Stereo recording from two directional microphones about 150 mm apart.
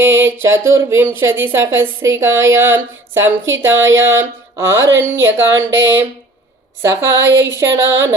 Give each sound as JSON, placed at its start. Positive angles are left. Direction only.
{"t": 0.0, "sound": "speech", "side_deg": -15}